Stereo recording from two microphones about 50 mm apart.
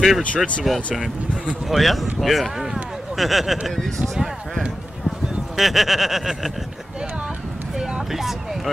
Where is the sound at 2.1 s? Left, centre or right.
Centre.